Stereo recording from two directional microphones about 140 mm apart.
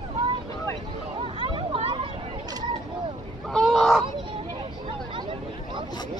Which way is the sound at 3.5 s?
Centre (ahead or behind).